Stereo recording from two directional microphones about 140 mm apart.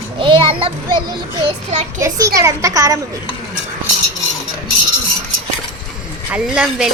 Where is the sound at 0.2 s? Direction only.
35° right (ahead or behind).